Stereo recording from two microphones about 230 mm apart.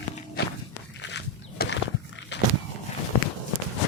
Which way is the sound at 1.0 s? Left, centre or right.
Left.